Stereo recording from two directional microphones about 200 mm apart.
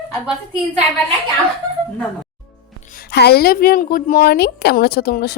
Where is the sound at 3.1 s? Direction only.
55° left (ahead or behind).